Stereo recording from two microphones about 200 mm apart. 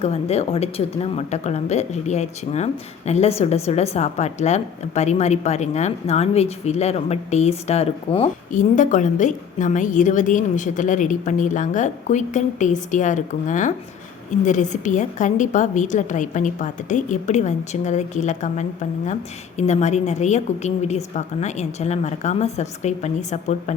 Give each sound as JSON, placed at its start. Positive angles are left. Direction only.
{"t": 0.0, "sound": "a woman's voice", "side_deg": 30}